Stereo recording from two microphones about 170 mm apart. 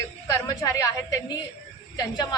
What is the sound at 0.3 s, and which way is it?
Speech, 20° left (ahead or behind).